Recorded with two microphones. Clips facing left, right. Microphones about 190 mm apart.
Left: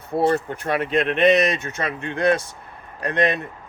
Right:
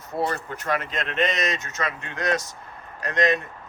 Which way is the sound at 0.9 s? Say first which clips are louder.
Left 9 dB; 65° left (ahead or behind).